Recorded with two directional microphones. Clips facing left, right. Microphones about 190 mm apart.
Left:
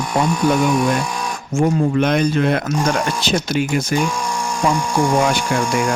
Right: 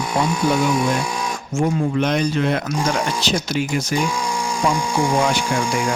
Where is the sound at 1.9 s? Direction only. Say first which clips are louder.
Left 3 dB; 55° left (ahead or behind).